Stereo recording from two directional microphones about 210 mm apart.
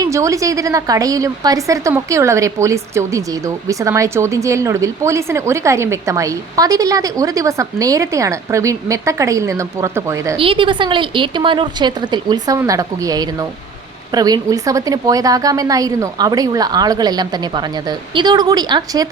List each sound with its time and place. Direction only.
0.0 s a woman's voice: 15° right (ahead or behind)
10.3 s a woman's voice: 25° right (ahead or behind)